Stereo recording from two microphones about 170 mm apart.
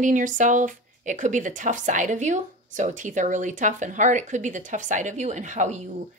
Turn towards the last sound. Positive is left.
turn(degrees=-45)  # may be behind; listen again after turning